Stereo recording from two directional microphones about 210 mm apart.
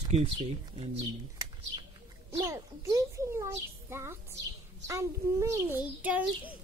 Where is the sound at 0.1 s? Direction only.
30° right (ahead or behind).